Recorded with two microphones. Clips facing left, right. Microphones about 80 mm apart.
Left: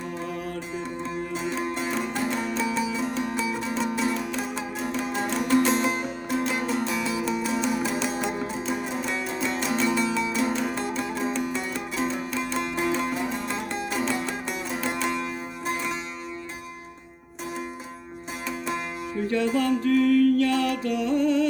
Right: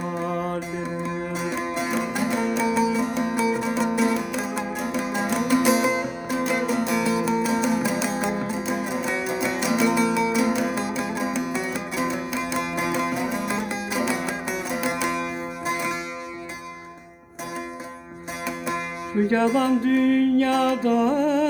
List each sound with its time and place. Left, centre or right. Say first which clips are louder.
0.2 s music: right 8 dB; right
1.0 s music: right 2 dB; centre
18.4 s music: right 2 dB; centre
19.2 s music: right 4 dB; right